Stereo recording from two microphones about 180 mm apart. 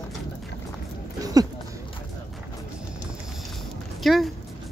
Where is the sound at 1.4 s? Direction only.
20° right (ahead or behind).